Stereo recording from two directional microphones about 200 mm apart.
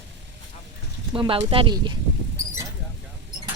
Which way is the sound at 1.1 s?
25° right (ahead or behind).